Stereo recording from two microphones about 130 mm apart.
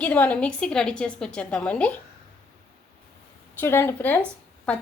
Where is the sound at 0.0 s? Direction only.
10° left (ahead or behind).